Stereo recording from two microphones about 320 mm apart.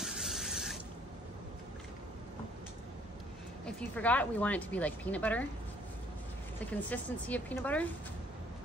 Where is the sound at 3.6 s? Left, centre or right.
Centre.